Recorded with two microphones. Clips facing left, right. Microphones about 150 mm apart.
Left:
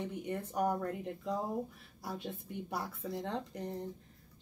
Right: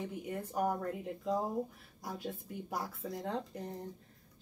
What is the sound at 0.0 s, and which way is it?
Speech, 5° right (ahead or behind).